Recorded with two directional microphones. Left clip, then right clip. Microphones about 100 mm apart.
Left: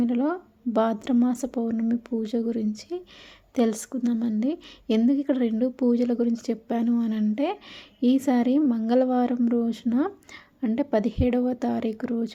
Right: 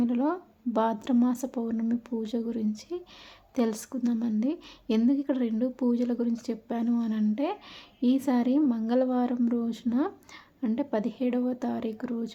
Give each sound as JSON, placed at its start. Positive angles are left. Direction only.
{"t": 0.0, "sound": "a woman's voice", "side_deg": 20}
{"t": 8.6, "sound": "a woman's voice", "side_deg": 15}
{"t": 8.9, "sound": "a woman's voice", "side_deg": 25}